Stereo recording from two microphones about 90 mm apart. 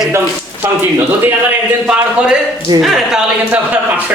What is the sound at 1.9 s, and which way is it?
A man's voice, 10° right (ahead or behind).